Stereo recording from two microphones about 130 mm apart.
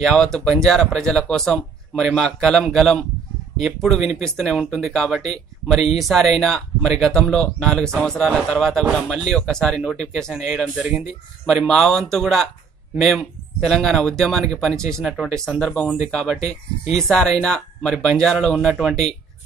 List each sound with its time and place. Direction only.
0.0 s speech: 5° left (ahead or behind)
16.3 s speech: 55° left (ahead or behind)
16.9 s speech: 5° left (ahead or behind)